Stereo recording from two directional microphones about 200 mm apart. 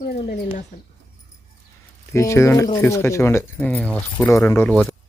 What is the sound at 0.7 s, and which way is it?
Speech, 40° left (ahead or behind).